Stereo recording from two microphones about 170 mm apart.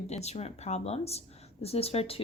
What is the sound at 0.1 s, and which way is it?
Speech, 40° left (ahead or behind).